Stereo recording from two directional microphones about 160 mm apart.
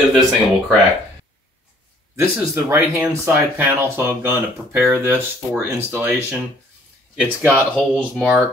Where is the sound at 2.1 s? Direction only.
15° right (ahead or behind).